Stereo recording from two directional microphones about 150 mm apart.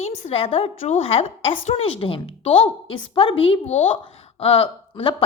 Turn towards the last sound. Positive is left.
turn(degrees=40)  # may be behind; listen again after turning